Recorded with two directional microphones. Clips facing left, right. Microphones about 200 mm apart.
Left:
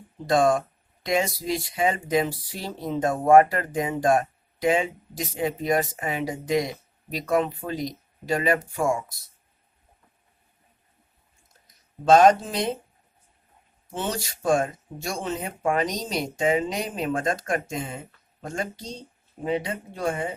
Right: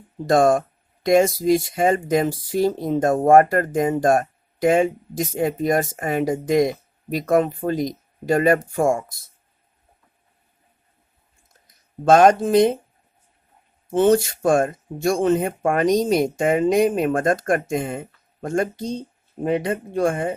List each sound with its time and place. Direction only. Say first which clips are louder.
0.3 s speech: right 4 dB; 50° right (ahead or behind)
12.0 s speech: right 3 dB; 50° right (ahead or behind)
13.9 s speech: right 14 dB; 50° right (ahead or behind)